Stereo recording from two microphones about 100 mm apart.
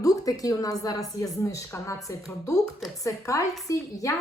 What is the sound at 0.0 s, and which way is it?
A woman's voice, 35° left (ahead or behind).